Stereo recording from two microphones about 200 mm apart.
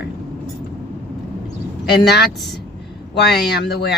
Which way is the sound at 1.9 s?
55° left (ahead or behind).